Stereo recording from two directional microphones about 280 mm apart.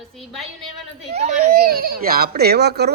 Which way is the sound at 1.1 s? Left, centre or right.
Right.